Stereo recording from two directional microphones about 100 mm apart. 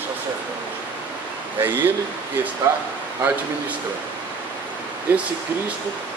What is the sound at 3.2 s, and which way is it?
Speech, 20° right (ahead or behind).